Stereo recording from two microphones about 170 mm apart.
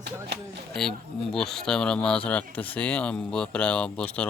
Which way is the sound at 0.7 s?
Centre (ahead or behind).